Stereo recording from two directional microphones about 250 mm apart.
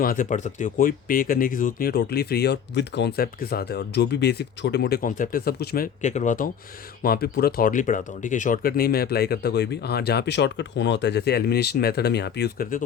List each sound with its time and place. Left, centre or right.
0.0 s speech: left